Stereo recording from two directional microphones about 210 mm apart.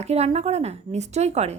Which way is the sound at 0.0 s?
30° right (ahead or behind).